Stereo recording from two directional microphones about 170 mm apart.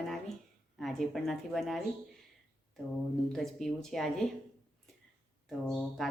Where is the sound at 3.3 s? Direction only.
Centre (ahead or behind).